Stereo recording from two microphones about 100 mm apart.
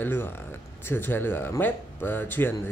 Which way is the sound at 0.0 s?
20° left (ahead or behind).